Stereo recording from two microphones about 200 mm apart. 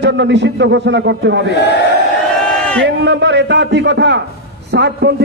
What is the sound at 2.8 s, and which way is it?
A man's voice, 60° right (ahead or behind).